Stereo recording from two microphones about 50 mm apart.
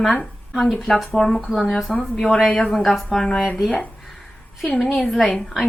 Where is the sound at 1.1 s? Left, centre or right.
Centre.